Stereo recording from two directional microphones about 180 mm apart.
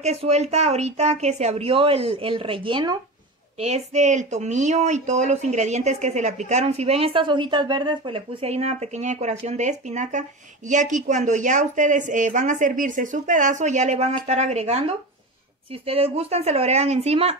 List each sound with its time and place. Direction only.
0.0 s speech: 35° right (ahead or behind)
3.5 s speech: 35° right (ahead or behind)